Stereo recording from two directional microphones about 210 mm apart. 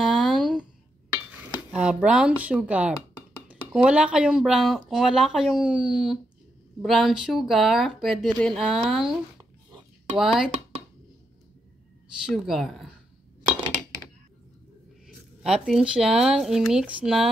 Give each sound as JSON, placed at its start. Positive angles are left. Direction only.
{"t": 0.1, "sound": "a sound", "side_deg": 0}
{"t": 1.7, "sound": "speech", "side_deg": -5}
{"t": 12.3, "sound": "speech", "side_deg": 0}
{"t": 15.4, "sound": "speech", "side_deg": -5}